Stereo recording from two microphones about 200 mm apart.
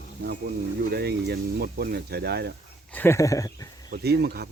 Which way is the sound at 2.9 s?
10° left (ahead or behind).